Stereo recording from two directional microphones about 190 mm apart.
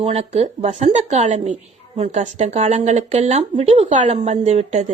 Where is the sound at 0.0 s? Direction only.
30° right (ahead or behind).